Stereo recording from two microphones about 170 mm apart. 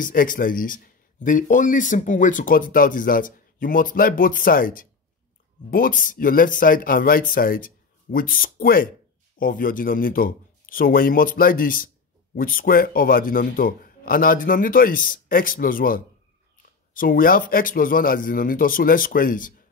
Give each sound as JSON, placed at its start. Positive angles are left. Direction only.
{"t": 0.0, "sound": "a man's voice", "side_deg": 55}